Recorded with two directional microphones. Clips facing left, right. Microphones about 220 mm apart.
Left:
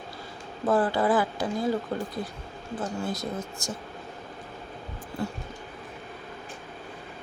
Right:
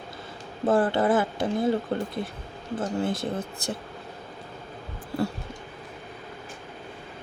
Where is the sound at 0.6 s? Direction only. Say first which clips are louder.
Right 2 dB; 30° right (ahead or behind).